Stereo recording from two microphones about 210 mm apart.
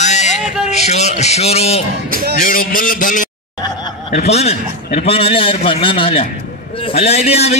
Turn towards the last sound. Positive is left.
turn(degrees=30)  # may be behind; listen again after turning